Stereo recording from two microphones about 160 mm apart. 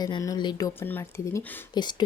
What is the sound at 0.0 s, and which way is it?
Speech, 25° left (ahead or behind).